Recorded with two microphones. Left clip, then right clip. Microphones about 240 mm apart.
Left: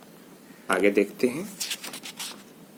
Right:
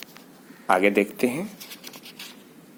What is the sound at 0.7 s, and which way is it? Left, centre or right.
Speech, right.